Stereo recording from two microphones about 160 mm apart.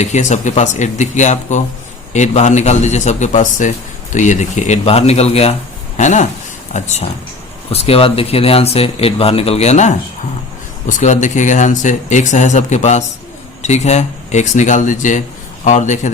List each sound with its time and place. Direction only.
0.0 s speech: 45° left (ahead or behind)